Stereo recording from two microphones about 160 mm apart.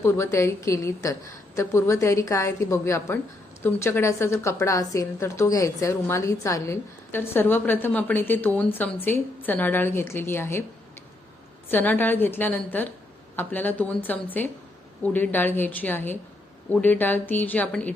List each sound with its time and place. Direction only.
0.0 s a woman's voice: 15° left (ahead or behind)
11.7 s a woman's voice: 10° left (ahead or behind)